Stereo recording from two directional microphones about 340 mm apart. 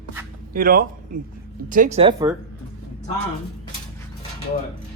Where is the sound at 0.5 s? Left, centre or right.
Right.